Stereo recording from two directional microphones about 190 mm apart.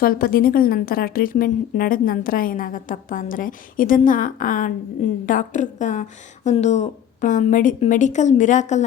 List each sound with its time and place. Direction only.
0.0 s a woman's voice: 50° left (ahead or behind)